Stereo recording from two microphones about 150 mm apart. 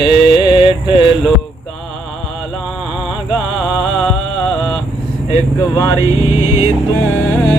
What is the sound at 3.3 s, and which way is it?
Music, 5° right (ahead or behind).